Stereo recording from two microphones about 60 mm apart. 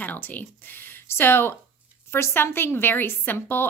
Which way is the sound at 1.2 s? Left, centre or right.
Left.